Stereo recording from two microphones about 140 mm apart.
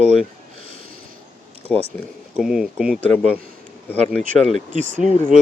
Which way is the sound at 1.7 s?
5° left (ahead or behind).